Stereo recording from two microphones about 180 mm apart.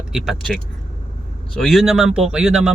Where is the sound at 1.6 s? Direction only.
Centre (ahead or behind).